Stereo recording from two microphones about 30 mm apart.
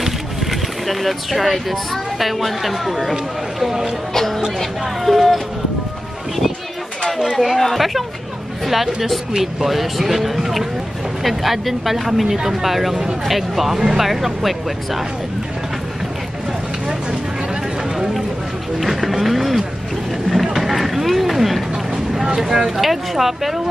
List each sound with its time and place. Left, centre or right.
0.0 s speech: centre
4.1 s speech: centre
5.0 s speech: centre
7.3 s speech: centre
18.8 s speech: centre
20.5 s vehicle: centre
21.9 s vehicle: centre
22.8 s speech: centre